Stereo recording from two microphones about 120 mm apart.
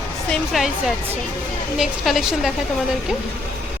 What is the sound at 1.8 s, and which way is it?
Speech, centre (ahead or behind).